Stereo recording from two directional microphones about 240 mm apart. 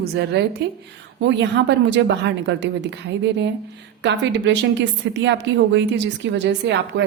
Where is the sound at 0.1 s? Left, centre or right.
Right.